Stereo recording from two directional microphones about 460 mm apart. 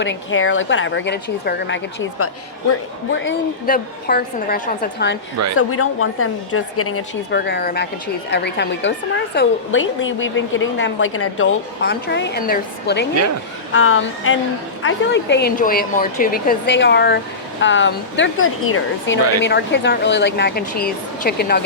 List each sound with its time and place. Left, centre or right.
0.0 s a woman's voice: left